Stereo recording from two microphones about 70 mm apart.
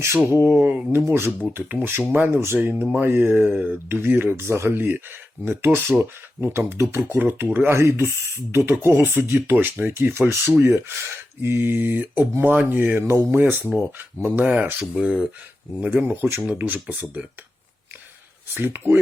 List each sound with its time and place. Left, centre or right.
0.6 s speech: right
13.0 s speech: right
18.5 s speech: right